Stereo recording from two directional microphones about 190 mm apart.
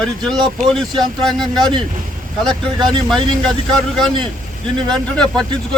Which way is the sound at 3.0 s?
Centre (ahead or behind).